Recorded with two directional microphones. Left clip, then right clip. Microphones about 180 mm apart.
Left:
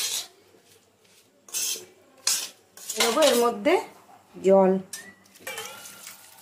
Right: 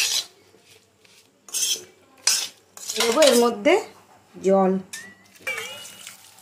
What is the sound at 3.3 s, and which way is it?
Speech, 15° right (ahead or behind).